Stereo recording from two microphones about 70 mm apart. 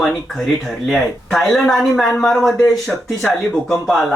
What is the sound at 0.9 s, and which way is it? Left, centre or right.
Speech, centre.